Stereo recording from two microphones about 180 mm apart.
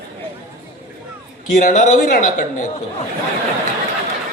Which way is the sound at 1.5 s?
45° left (ahead or behind).